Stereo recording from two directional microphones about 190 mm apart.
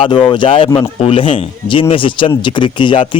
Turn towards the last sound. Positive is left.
turn(degrees=25)  # may be behind; listen again after turning